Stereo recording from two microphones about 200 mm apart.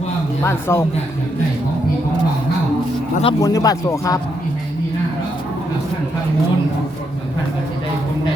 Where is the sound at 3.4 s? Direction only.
20° left (ahead or behind).